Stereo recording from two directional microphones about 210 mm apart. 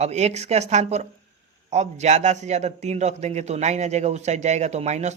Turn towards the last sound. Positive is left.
turn(degrees=-30)  # may be behind; listen again after turning